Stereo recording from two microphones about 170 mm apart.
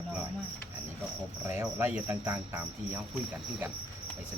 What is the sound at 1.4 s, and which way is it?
Cricket, 15° right (ahead or behind).